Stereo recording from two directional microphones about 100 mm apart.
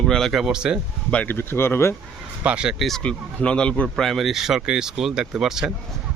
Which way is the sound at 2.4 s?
10° right (ahead or behind).